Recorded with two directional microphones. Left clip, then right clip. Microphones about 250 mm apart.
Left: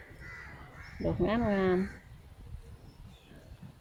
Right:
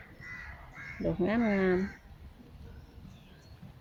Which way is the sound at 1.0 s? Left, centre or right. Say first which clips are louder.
Even; centre.